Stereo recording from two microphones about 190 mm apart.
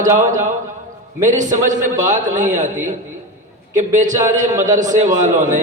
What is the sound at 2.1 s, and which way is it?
Speech, 40° right (ahead or behind).